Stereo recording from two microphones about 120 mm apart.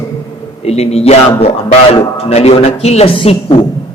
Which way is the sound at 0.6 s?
60° left (ahead or behind).